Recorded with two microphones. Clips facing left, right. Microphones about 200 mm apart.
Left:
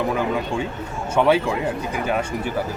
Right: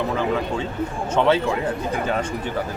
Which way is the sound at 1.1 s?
10° left (ahead or behind).